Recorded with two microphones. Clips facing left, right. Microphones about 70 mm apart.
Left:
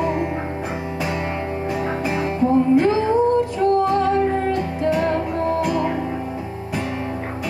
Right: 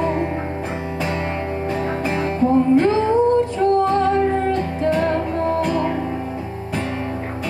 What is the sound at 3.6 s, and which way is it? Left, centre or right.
Music, right.